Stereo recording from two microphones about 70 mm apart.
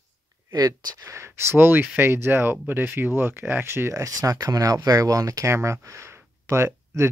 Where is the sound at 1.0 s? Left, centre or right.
Right.